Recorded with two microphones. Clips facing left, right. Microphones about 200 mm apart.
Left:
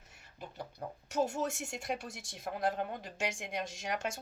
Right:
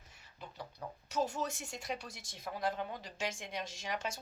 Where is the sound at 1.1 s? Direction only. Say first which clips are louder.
Left 3 dB; 45° left (ahead or behind).